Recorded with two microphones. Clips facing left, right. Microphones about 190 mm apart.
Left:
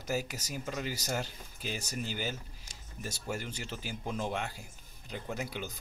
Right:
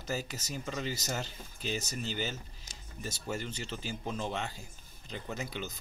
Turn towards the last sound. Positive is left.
turn(degrees=10)  # may be behind; listen again after turning